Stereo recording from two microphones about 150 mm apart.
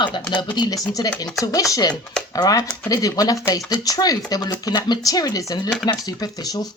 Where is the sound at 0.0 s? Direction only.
30° left (ahead or behind).